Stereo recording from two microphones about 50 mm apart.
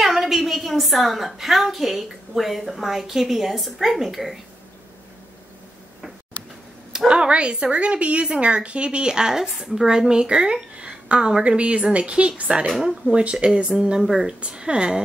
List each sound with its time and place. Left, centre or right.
0.0 s a woman's voice: centre
7.1 s a woman's voice: right
12.8 s a woman's voice: centre